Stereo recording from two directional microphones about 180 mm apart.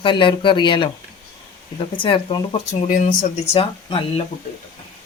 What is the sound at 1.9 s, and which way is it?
Speech, 30° left (ahead or behind).